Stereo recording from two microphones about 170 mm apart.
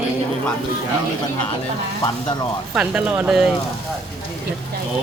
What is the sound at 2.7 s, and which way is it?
Speech, 5° right (ahead or behind).